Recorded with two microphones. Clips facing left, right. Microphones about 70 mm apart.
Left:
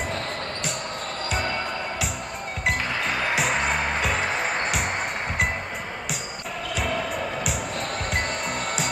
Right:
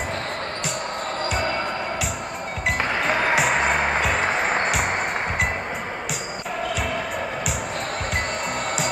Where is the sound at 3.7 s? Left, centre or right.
Right.